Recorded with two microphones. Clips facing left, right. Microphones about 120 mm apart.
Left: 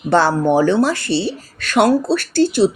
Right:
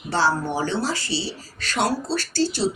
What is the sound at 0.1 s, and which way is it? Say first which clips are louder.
Speech: left 8 dB; 60° left (ahead or behind).